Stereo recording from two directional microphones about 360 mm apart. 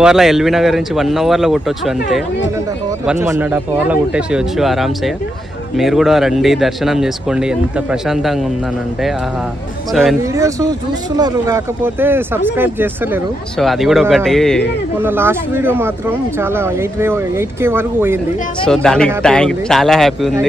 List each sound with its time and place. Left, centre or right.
0.0 s speech: centre
9.9 s speech: centre